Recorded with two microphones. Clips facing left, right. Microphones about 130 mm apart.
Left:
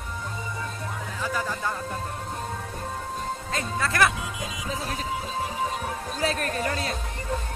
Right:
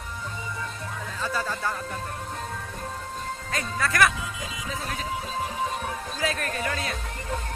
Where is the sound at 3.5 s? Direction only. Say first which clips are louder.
Right 1 dB; 25° left (ahead or behind).